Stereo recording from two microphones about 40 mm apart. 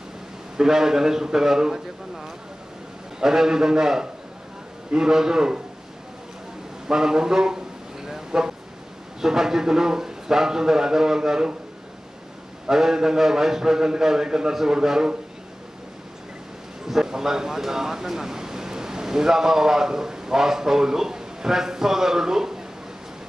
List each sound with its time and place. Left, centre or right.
0.6 s a man's voice: centre
3.2 s a man's voice: centre
6.9 s a sound: centre
9.2 s a man's voice: centre
12.6 s a man's voice: centre
16.8 s speech: centre